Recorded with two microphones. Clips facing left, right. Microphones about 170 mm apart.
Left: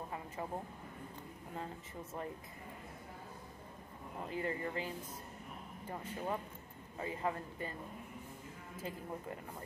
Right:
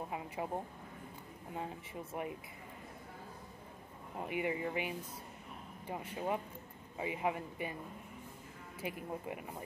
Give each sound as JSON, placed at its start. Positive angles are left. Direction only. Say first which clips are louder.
{"t": 0.4, "sound": "speech", "louder": "right 3 dB", "side_deg": -15}
{"t": 4.2, "sound": "speech", "louder": "right 3 dB", "side_deg": -15}
{"t": 8.8, "sound": "speech", "louder": "right 3 dB", "side_deg": -15}